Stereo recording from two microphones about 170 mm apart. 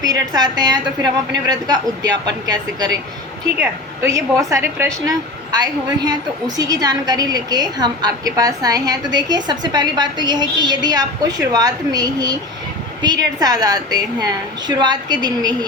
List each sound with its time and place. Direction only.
0.0 s a woman's voice: 20° right (ahead or behind)